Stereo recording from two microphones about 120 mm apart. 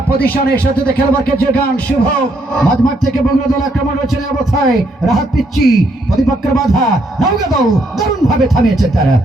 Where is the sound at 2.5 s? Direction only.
5° left (ahead or behind).